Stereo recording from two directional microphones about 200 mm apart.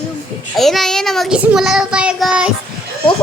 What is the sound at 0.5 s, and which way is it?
Child singing, centre (ahead or behind).